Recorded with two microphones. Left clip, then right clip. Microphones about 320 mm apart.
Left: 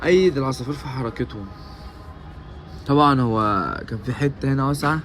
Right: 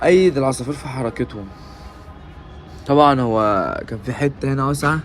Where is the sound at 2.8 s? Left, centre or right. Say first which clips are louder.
Right 4 dB; centre.